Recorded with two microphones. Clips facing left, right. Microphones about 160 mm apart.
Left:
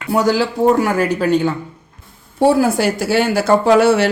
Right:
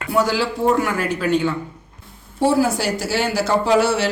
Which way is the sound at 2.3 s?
55° left (ahead or behind).